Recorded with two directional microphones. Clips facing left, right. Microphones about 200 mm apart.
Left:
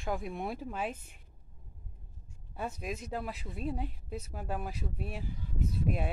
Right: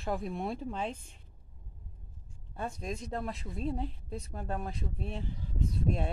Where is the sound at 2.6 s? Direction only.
5° left (ahead or behind).